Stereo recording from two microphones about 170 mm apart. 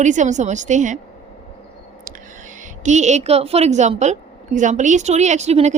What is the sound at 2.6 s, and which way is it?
A woman's voice, 45° right (ahead or behind).